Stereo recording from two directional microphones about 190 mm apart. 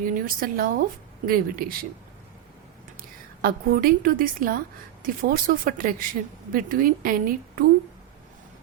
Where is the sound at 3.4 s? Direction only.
50° right (ahead or behind).